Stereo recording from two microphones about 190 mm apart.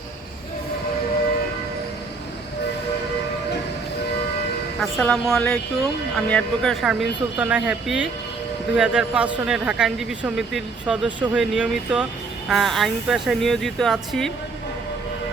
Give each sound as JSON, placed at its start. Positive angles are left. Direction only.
{"t": 4.8, "sound": "speech", "side_deg": 5}